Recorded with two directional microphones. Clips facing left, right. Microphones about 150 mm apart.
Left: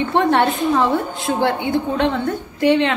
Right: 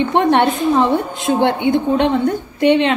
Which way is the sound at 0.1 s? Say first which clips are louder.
Even; 20° right (ahead or behind).